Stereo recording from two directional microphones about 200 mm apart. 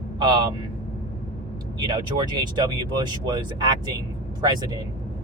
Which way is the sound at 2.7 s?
20° right (ahead or behind).